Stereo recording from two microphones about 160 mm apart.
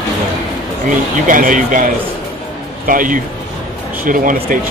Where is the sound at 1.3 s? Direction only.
55° right (ahead or behind).